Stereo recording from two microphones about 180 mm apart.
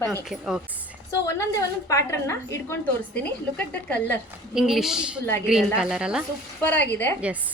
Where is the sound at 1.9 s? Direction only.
15° left (ahead or behind).